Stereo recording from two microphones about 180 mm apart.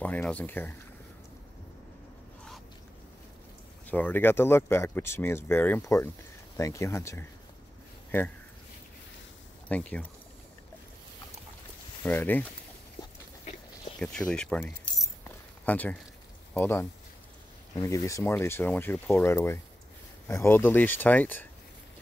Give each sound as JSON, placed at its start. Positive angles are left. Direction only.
{"t": 0.0, "sound": "speech", "side_deg": 10}
{"t": 3.8, "sound": "speech", "side_deg": 10}
{"t": 9.7, "sound": "speech", "side_deg": 5}
{"t": 12.0, "sound": "speech", "side_deg": 10}
{"t": 13.9, "sound": "speech", "side_deg": 5}
{"t": 15.2, "sound": "keys jangling", "side_deg": 10}
{"t": 16.5, "sound": "speech", "side_deg": 10}